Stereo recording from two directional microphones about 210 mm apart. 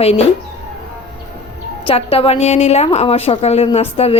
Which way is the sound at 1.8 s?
25° left (ahead or behind).